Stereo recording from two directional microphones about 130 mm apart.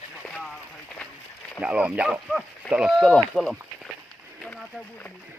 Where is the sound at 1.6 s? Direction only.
10° right (ahead or behind).